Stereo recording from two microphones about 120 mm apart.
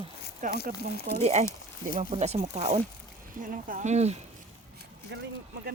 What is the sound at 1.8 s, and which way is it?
Speech, 90° right.